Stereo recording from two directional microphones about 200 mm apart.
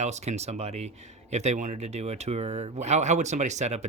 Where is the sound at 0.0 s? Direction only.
35° right (ahead or behind).